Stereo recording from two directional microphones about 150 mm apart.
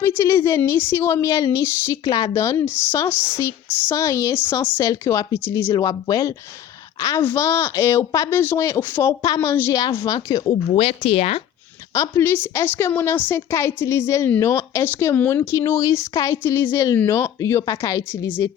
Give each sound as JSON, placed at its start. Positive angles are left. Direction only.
{"t": 0.0, "sound": "a woman's voice", "side_deg": 15}
{"t": 11.9, "sound": "a woman's voice", "side_deg": 15}